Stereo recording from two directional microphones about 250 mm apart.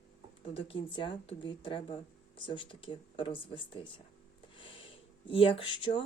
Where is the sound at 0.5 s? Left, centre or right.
Centre.